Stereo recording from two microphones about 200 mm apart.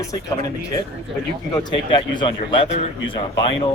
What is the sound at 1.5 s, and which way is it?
Speech, 25° left (ahead or behind).